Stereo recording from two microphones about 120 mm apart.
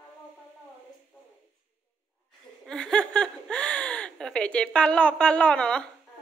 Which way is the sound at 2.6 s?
5° left (ahead or behind).